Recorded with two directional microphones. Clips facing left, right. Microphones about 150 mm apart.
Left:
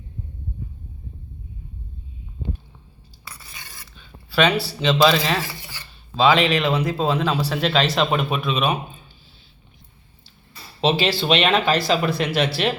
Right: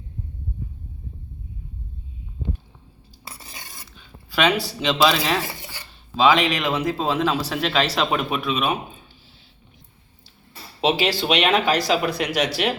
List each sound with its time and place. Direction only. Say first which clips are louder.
3.4 s a sound: right 2 dB; 40° right (ahead or behind)
3.9 s speech: left 4 dB; 15° right (ahead or behind)
10.8 s speech: left 1 dB; 10° right (ahead or behind)